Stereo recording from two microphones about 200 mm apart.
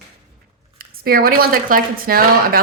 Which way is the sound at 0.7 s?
45° right (ahead or behind).